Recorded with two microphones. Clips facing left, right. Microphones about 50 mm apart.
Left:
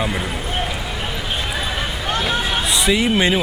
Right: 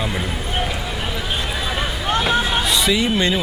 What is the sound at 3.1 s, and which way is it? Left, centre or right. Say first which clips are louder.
Speech: left 2 dB; centre.